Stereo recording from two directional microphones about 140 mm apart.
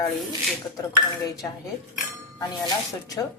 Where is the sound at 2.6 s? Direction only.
25° left (ahead or behind).